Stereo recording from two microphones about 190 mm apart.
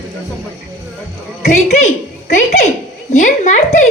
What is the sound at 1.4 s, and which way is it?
A woman's voice, 35° left (ahead or behind).